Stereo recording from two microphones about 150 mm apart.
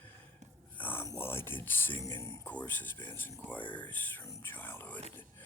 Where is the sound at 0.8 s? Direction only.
15° left (ahead or behind).